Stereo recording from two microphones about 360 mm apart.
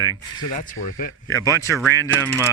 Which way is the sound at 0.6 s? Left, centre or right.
Left.